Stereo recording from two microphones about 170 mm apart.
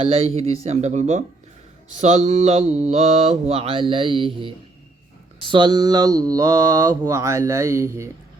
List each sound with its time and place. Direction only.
0.0 s mantra: 35° right (ahead or behind); by 8.1 s 15° right (ahead or behind)